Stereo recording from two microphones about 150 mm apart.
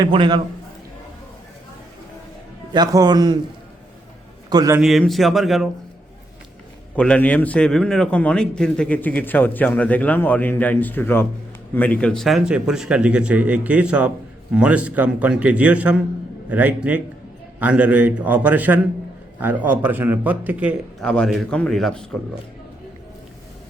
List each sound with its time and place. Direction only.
0.0 s a man's voice: 30° right (ahead or behind)
2.7 s a man's voice: 25° right (ahead or behind)
4.4 s a man's voice: 25° right (ahead or behind)
4.8 s speech: centre (ahead or behind)
6.9 s a man's voice: 5° left (ahead or behind); by 20.7 s 10° right (ahead or behind)
21.0 s speech: 5° left (ahead or behind)